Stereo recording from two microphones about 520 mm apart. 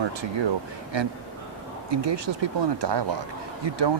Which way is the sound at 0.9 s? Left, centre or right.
Right.